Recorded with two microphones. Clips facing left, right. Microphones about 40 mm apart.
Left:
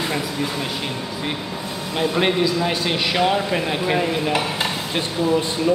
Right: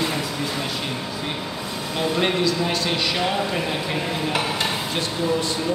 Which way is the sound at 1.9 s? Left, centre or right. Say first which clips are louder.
Left 2 dB; centre.